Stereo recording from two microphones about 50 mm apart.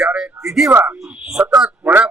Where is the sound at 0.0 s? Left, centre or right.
Centre.